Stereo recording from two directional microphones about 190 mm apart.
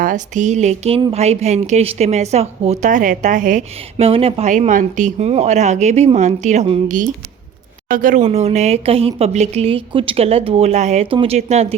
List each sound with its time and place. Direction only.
0.0 s speech: 40° right (ahead or behind)